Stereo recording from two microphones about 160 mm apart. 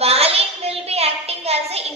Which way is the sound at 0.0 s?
40° right (ahead or behind).